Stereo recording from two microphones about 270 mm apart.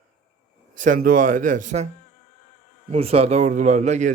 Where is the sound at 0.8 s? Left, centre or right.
Right.